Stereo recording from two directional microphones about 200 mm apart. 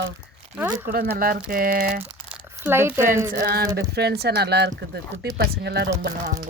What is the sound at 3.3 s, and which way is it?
Speech, 45° right (ahead or behind).